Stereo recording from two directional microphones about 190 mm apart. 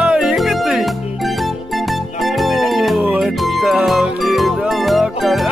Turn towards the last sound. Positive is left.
turn(degrees=0)  # may be behind; listen again after turning